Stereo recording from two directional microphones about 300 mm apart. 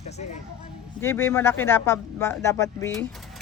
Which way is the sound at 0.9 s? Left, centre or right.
Centre.